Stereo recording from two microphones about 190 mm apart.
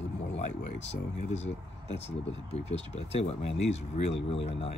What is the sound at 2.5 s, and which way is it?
Speech, 35° left (ahead or behind).